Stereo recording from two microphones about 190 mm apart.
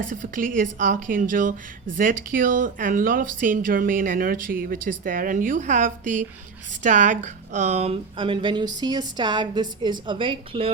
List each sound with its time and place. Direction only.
0.0 s a woman's voice: 45° right (ahead or behind); by 10.7 s 30° right (ahead or behind)